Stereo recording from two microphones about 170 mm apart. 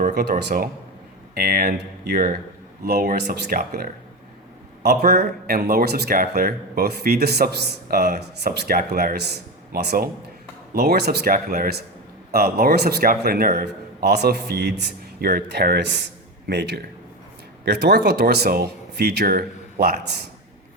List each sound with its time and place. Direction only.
0.0 s speech: 70° right (ahead or behind)
4.8 s speech: 70° right (ahead or behind)
14.0 s speech: 75° right (ahead or behind); by 16.0 s 90° right
16.5 s speech: 75° right (ahead or behind)